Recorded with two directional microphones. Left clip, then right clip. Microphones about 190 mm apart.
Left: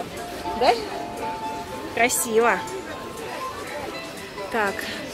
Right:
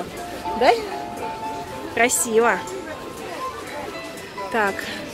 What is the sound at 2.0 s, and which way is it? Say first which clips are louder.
Speech: right 2 dB; 15° right (ahead or behind).